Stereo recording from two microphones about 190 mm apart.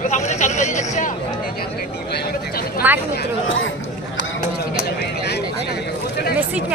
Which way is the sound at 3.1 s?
90° left.